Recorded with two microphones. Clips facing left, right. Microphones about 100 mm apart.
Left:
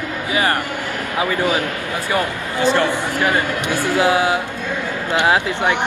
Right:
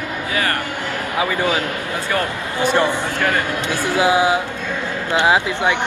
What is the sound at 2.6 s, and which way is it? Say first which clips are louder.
Speech: even; 15° right (ahead or behind).